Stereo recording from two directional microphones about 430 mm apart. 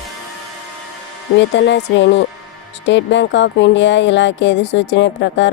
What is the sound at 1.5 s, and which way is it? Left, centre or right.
Speech, left.